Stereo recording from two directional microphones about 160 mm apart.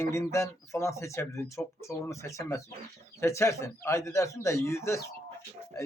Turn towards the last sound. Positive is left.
turn(degrees=15)  # may be behind; listen again after turning